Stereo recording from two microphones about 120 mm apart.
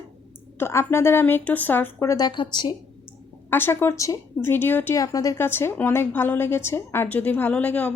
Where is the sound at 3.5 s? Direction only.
15° left (ahead or behind).